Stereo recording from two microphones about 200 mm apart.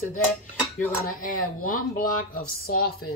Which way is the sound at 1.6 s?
45° left (ahead or behind).